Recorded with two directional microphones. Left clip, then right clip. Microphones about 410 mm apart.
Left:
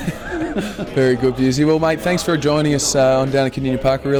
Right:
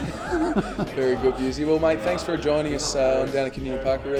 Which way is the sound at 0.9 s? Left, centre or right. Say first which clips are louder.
Left 6 dB; left.